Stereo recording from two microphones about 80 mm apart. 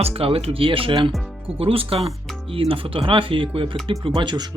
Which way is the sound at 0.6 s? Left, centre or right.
Right.